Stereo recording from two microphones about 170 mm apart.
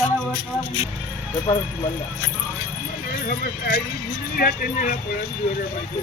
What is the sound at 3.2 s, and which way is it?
Speech, 55° left (ahead or behind).